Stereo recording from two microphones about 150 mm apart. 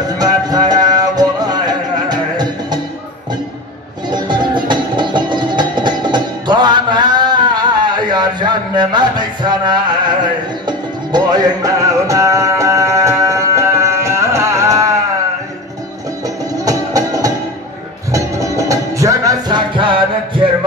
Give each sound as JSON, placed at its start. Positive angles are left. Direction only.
{"t": 0.2, "sound": "music", "side_deg": -25}
{"t": 4.1, "sound": "music", "side_deg": -30}
{"t": 16.6, "sound": "music", "side_deg": -25}